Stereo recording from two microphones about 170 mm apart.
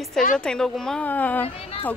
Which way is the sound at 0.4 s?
5° left (ahead or behind).